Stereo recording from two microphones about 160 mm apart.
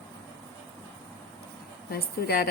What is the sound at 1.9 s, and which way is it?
Speech, 75° left (ahead or behind).